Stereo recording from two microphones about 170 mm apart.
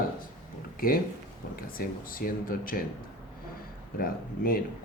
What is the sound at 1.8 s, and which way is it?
Speech, 55° left (ahead or behind).